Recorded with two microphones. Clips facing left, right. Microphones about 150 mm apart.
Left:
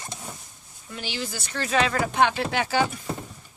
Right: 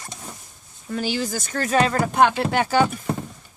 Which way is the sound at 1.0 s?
40° right (ahead or behind).